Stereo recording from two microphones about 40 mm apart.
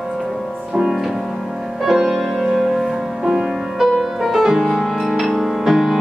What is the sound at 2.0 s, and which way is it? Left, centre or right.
Music, centre.